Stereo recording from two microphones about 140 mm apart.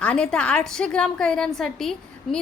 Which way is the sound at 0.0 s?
5° left (ahead or behind).